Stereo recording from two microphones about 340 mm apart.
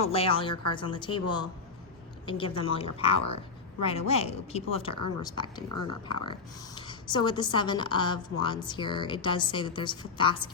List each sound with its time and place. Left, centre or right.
0.0 s a woman's voice: centre